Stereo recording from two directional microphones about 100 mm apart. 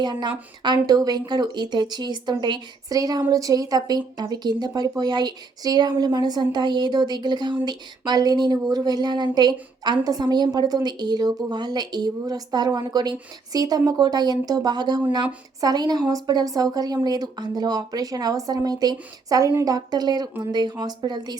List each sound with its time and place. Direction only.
0.0 s a woman's voice: 50° right (ahead or behind)